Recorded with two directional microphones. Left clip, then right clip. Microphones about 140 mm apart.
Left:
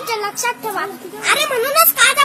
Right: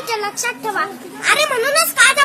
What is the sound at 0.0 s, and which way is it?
A woman's voice, 15° right (ahead or behind).